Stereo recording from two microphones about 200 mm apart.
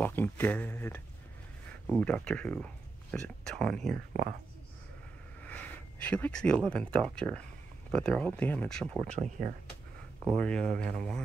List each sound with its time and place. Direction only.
0.0 s speech: 10° left (ahead or behind)
4.1 s speech: 45° right (ahead or behind)
5.4 s speech: 5° left (ahead or behind)
9.0 s speech: 35° right (ahead or behind)
10.3 s speech: 5° left (ahead or behind)